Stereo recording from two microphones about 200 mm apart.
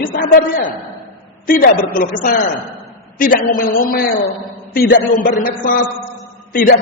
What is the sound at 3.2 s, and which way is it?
A man's voice, 45° left (ahead or behind).